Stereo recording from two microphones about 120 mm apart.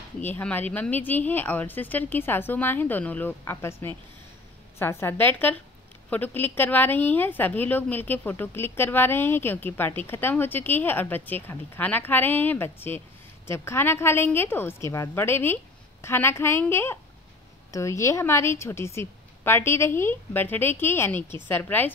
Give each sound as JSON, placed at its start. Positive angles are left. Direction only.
{"t": 0.2, "sound": "a woman's voice", "side_deg": 15}